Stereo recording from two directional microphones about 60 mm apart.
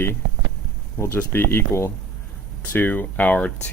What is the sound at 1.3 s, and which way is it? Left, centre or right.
Speech, left.